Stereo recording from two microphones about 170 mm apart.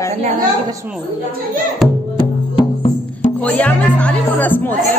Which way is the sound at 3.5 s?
10° left (ahead or behind).